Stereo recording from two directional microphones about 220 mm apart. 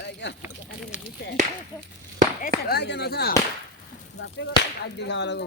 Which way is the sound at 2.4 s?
45° left (ahead or behind).